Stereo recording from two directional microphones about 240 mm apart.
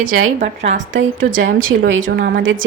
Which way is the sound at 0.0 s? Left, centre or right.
Right.